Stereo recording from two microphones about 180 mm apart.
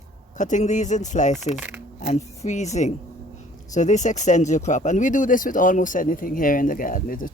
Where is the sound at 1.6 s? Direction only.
10° right (ahead or behind).